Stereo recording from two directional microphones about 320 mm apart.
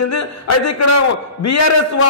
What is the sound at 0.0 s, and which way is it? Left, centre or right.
A man's voice, left.